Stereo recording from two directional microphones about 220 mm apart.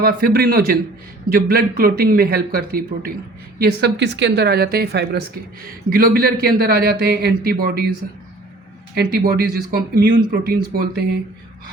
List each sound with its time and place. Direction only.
0.0 s a man's voice: 40° right (ahead or behind)
9.0 s speech: 45° right (ahead or behind)